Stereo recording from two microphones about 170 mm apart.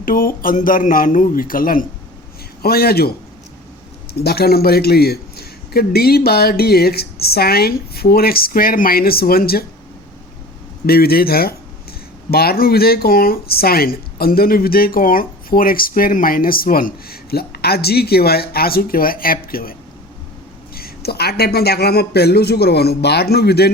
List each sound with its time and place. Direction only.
0.0 s speech: 55° left (ahead or behind)
10.8 s speech: 65° left (ahead or behind)
20.7 s speech: 65° left (ahead or behind)